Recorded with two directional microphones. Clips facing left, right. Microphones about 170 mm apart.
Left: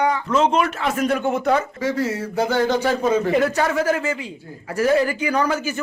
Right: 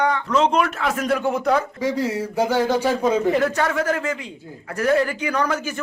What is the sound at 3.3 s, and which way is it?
A man's voice, 5° left (ahead or behind).